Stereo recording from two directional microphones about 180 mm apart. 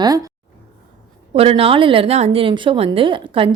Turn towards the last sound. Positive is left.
turn(degrees=-30)  # may be behind; listen again after turning